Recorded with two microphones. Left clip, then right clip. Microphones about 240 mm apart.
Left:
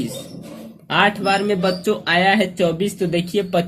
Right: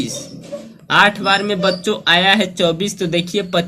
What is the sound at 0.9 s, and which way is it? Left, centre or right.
Speech, centre.